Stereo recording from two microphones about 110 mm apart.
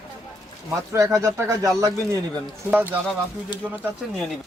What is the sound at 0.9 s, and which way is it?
Speech, 25° right (ahead or behind).